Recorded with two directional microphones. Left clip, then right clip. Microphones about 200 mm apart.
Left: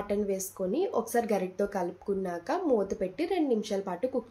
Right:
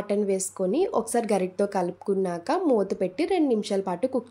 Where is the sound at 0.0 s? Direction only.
50° right (ahead or behind).